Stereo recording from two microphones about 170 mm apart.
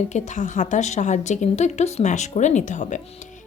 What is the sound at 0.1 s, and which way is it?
A woman's voice, 45° left (ahead or behind).